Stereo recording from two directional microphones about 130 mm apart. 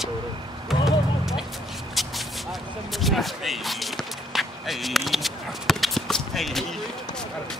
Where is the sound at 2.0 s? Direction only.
Centre (ahead or behind).